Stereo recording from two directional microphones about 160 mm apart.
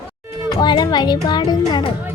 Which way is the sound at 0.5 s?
25° left (ahead or behind).